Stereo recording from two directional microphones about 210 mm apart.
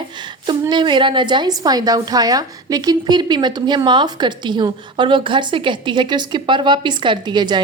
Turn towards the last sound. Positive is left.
turn(degrees=-20)  # may be behind; listen again after turning